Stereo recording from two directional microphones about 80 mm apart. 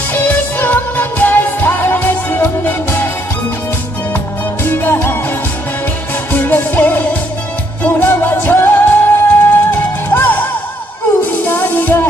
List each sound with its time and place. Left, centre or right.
0.1 s music: left
4.6 s music: left
6.3 s music: left
11.5 s music: left